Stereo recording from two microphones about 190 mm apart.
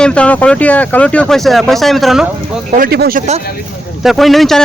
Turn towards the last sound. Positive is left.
turn(degrees=0)  # may be behind; listen again after turning